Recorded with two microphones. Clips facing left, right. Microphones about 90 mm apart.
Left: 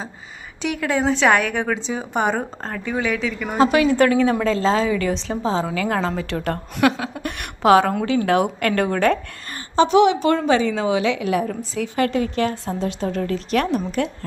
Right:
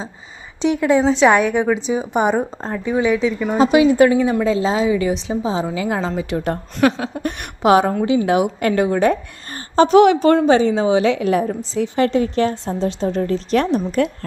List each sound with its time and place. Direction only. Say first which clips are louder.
0.6 s a woman's voice: right 6 dB; 25° right (ahead or behind)
9.7 s a woman's voice: right 4 dB; 45° right (ahead or behind)